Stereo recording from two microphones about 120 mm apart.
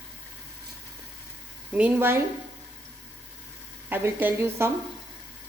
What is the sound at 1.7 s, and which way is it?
Speech, 10° right (ahead or behind).